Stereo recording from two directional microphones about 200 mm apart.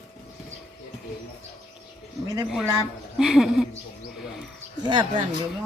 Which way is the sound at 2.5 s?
Centre (ahead or behind).